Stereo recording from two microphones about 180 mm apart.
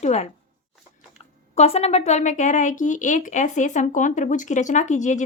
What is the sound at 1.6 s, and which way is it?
Speech, 35° left (ahead or behind).